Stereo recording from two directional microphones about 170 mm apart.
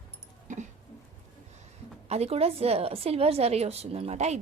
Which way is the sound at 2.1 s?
40° right (ahead or behind).